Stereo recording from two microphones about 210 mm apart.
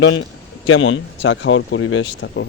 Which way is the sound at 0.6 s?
70° left (ahead or behind).